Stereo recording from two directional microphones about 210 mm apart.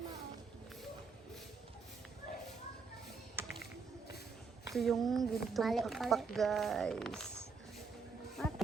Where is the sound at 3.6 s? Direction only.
50° left (ahead or behind).